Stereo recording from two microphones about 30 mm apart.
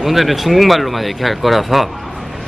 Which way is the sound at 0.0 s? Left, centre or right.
Centre.